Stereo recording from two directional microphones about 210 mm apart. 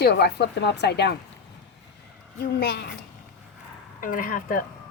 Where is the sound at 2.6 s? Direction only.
50° left (ahead or behind).